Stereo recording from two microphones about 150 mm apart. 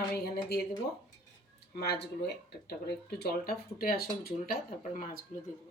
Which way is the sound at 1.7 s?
90° left.